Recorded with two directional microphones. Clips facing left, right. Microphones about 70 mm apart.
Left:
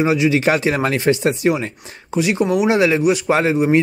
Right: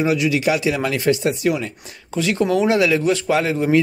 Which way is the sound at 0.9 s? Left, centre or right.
Left.